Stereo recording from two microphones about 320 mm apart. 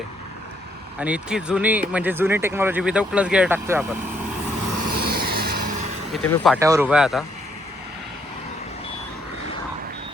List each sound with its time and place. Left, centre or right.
0.9 s speech: centre
4.9 s vehicle: right
6.2 s speech: centre